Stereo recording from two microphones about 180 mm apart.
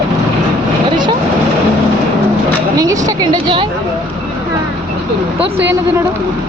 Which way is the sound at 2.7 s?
20° right (ahead or behind).